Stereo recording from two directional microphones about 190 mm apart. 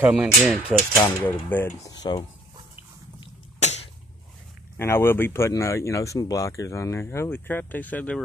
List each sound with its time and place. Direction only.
0.0 s speech: centre (ahead or behind)
0.9 s speech: 25° left (ahead or behind)
1.5 s speech: 10° left (ahead or behind)
2.0 s speech: 20° left (ahead or behind)
3.6 s a sound: 35° left (ahead or behind)
4.7 s speech: 10° left (ahead or behind)